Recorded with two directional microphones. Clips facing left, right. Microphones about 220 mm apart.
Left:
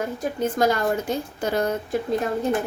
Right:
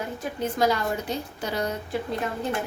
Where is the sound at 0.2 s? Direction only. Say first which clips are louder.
Left 2 dB; 45° left (ahead or behind).